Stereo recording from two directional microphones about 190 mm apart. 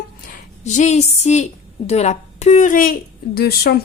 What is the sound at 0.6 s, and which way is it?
A woman's voice, 40° left (ahead or behind).